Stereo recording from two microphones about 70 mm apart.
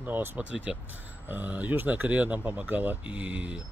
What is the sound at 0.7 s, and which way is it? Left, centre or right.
Speech, centre.